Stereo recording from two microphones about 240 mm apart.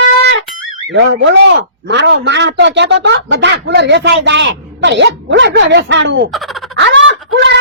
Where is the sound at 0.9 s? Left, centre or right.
Right.